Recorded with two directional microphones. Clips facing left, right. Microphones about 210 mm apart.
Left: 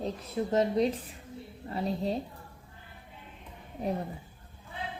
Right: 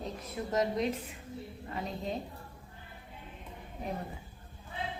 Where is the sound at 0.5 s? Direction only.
30° left (ahead or behind).